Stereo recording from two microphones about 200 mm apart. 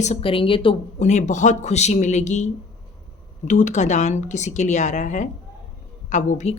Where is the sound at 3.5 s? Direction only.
40° left (ahead or behind).